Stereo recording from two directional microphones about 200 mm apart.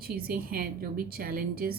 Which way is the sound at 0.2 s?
45° right (ahead or behind).